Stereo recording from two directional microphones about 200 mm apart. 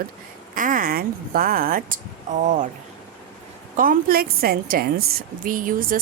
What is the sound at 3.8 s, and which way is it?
A woman's voice, 45° right (ahead or behind).